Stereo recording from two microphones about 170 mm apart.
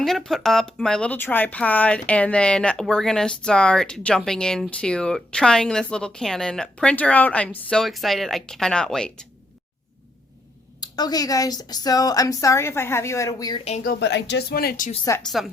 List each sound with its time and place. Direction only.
0.0 s speech: centre (ahead or behind)
10.8 s speech: 25° left (ahead or behind)
13.8 s speech: 90° left; by 14.8 s 65° left (ahead or behind)
15.2 s speech: centre (ahead or behind)